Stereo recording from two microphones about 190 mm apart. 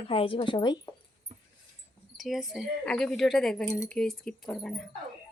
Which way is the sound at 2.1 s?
Centre (ahead or behind).